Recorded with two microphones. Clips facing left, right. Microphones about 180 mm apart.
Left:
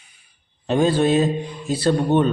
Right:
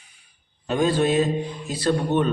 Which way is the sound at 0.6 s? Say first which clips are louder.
Left 3 dB; 30° left (ahead or behind).